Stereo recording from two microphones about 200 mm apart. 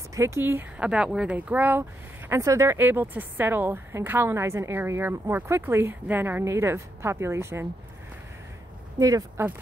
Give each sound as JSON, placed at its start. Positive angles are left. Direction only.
{"t": 0.1, "sound": "speech", "side_deg": -15}
{"t": 8.9, "sound": "speech", "side_deg": -15}